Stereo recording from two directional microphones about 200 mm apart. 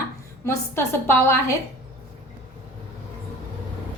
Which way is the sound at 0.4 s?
10° left (ahead or behind).